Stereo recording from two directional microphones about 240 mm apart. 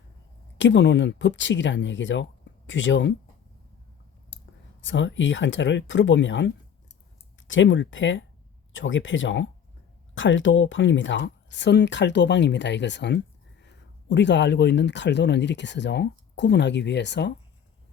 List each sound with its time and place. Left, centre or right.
0.6 s speech: left
4.8 s speech: left